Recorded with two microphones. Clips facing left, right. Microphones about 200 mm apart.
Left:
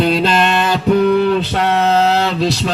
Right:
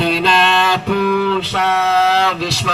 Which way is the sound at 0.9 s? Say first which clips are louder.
Left 6 dB; 35° left (ahead or behind).